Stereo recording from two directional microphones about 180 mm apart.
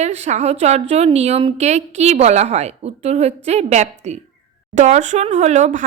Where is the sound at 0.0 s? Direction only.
40° right (ahead or behind).